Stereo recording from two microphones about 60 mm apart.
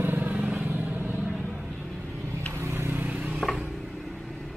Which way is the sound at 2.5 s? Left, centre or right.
Right.